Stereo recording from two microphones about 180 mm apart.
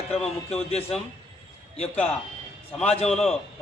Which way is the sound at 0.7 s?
35° left (ahead or behind).